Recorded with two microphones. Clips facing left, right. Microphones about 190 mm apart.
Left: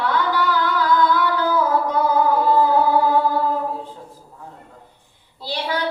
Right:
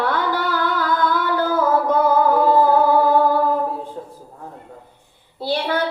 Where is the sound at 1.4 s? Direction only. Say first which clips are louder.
Right 4 dB; 50° right (ahead or behind).